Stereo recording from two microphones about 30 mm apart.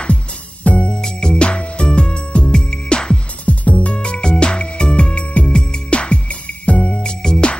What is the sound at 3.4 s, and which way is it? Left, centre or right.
Music, left.